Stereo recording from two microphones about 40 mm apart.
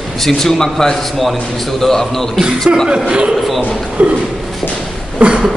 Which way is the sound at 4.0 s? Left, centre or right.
Right.